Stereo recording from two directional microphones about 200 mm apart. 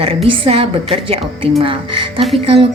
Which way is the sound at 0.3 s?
25° right (ahead or behind).